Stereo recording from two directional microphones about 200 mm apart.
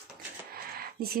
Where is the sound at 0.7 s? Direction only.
50° right (ahead or behind).